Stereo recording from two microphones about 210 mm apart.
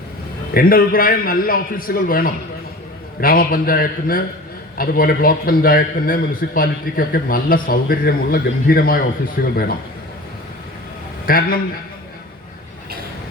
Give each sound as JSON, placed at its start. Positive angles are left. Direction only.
{"t": 0.5, "sound": "a man's voice", "side_deg": 45}
{"t": 11.3, "sound": "a man's voice", "side_deg": 45}